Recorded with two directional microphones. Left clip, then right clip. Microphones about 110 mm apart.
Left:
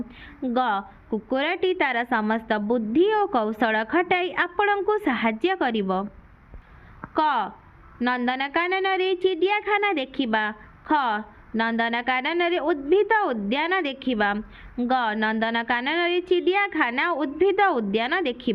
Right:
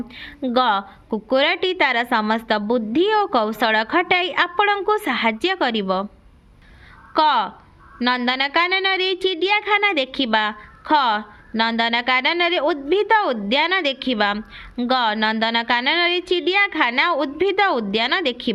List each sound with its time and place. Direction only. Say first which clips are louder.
0.1 s a woman's voice: right 6 dB; 40° right (ahead or behind)
7.1 s a woman's voice: right 5 dB; 35° right (ahead or behind)